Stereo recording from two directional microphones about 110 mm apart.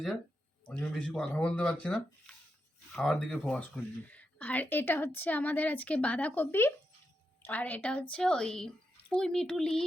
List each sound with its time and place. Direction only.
0.7 s a woman's voice: 10° left (ahead or behind)
4.1 s a woman's voice: 15° left (ahead or behind)